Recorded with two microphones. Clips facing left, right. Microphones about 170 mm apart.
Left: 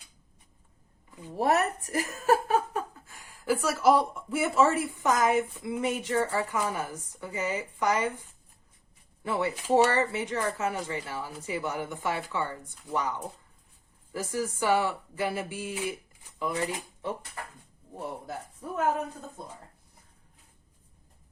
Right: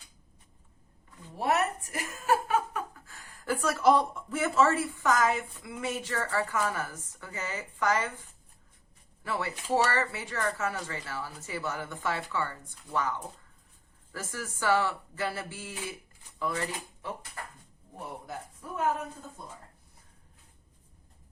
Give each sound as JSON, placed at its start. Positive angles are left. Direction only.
{"t": 1.4, "sound": "a sound", "side_deg": 40}
{"t": 2.9, "sound": "speech", "side_deg": 15}
{"t": 9.2, "sound": "speech", "side_deg": 20}